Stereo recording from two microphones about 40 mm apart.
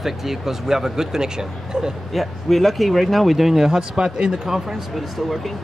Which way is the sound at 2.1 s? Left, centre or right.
Centre.